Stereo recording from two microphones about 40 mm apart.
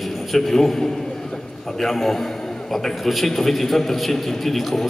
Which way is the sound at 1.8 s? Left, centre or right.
Centre.